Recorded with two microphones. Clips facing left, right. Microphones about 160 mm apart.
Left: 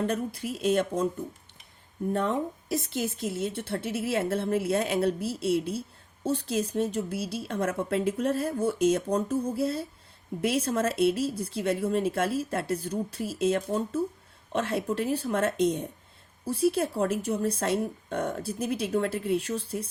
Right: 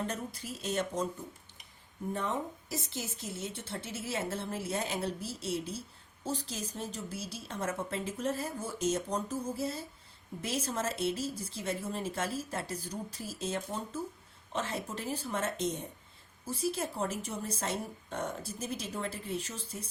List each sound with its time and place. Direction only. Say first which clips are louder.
0.1 s a woman's voice: left 9 dB; 60° left (ahead or behind)
2.1 s a woman's voice: left 7 dB; 65° left (ahead or behind)